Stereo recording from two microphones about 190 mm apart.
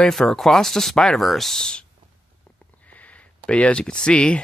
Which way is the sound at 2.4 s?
5° left (ahead or behind).